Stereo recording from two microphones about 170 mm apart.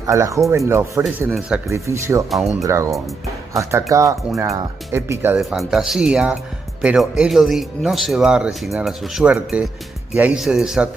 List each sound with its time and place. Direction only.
0.0 s speech: 15° right (ahead or behind)
2.2 s speech: centre (ahead or behind)
2.6 s speech: 20° right (ahead or behind)
5.4 s speech: centre (ahead or behind)